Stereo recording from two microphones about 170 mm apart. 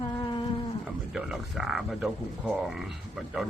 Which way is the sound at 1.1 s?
Centre (ahead or behind).